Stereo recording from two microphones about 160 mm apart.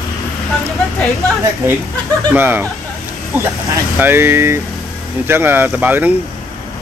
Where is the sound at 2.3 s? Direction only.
10° right (ahead or behind).